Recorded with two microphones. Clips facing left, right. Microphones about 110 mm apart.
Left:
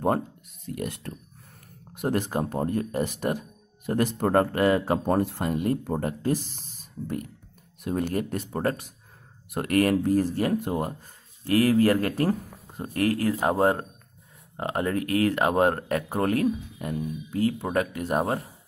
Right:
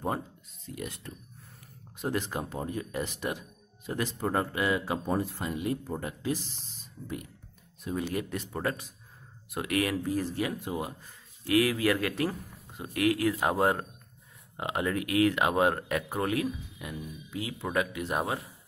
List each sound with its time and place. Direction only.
0.7 s speech: 55° left (ahead or behind)
11.4 s speech: 40° left (ahead or behind)